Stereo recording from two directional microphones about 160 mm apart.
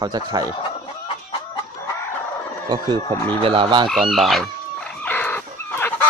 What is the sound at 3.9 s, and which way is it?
Chicken, centre (ahead or behind).